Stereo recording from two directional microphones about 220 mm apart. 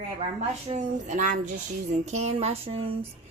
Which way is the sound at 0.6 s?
35° right (ahead or behind).